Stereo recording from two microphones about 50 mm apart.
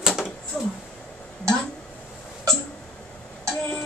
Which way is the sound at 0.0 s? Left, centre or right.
Centre.